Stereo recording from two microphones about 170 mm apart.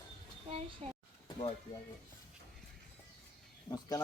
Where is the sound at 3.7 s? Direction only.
20° left (ahead or behind).